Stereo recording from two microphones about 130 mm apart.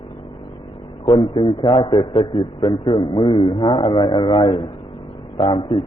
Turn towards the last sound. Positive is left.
turn(degrees=40)  # may be behind; listen again after turning